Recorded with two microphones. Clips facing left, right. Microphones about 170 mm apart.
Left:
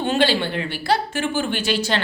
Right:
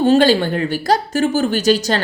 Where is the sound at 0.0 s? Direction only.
40° right (ahead or behind).